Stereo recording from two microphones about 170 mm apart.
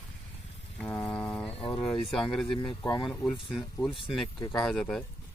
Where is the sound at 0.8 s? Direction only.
5° left (ahead or behind).